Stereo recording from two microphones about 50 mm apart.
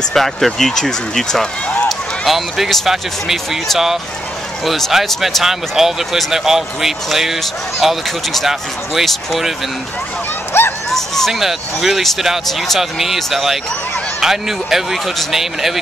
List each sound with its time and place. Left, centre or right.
0.1 s speech: centre
2.2 s speech: centre
4.6 s speech: centre
5.4 s speech: centre
10.5 s speech: left
10.9 s speech: centre
11.3 s speech: centre